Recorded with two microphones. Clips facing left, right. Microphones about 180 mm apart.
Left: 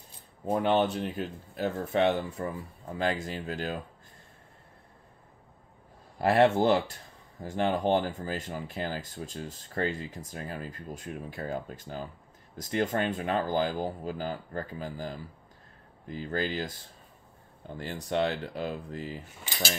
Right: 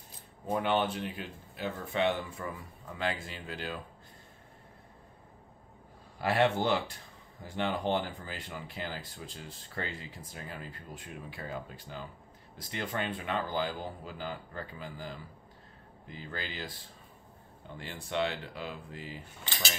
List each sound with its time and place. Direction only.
0.5 s speech: 35° left (ahead or behind)
6.1 s speech: 50° left (ahead or behind)
16.2 s speech: 45° left (ahead or behind)
17.7 s speech: 40° left (ahead or behind)